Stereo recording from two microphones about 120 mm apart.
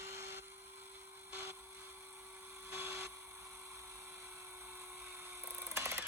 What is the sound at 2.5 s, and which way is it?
Dental drill, 20° right (ahead or behind).